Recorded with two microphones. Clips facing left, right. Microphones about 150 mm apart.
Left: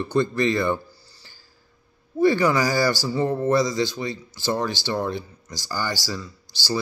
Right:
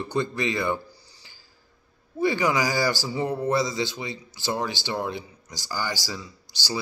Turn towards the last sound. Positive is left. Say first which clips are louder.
# left 5 dB
turn(degrees=-15)  # may be behind; listen again after turning